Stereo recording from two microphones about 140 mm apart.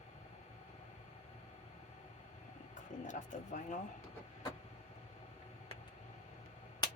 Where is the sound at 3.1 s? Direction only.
65° left (ahead or behind).